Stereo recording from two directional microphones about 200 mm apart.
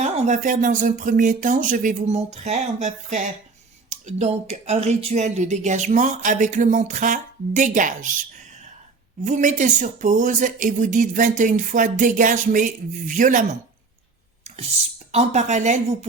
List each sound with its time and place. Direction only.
0.0 s speech: 35° right (ahead or behind)
14.4 s a sound: 35° right (ahead or behind)
15.1 s speech: 35° right (ahead or behind)